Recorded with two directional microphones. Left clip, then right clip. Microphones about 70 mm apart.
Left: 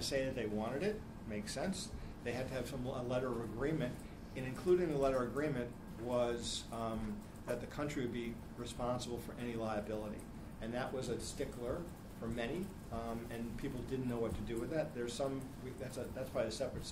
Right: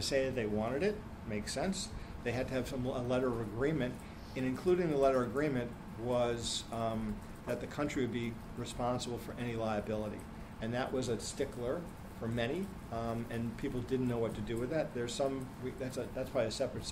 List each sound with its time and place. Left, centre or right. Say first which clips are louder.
0.0 s speech: right 5 dB; right
12.9 s speech: right 5 dB; right